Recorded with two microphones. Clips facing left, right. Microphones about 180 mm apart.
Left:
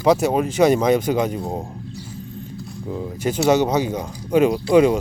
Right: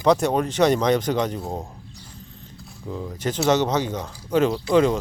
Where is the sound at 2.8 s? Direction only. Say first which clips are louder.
Left 3 dB; 15° left (ahead or behind).